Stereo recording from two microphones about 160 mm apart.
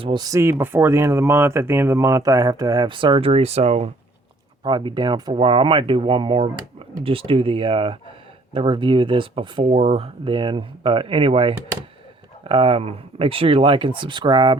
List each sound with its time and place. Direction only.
0.0 s speech: 25° right (ahead or behind)
4.6 s speech: 30° right (ahead or behind)